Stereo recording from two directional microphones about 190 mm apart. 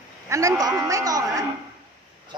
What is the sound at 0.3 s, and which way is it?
A woman's voice, 15° right (ahead or behind).